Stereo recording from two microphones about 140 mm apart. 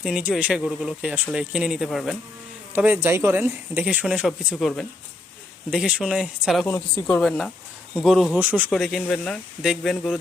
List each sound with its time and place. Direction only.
0.0 s speech: 5° right (ahead or behind)
2.7 s speech: 15° right (ahead or behind)
4.4 s speech: 5° left (ahead or behind)
8.4 s speech: 10° right (ahead or behind)
8.7 s speech: 5° left (ahead or behind)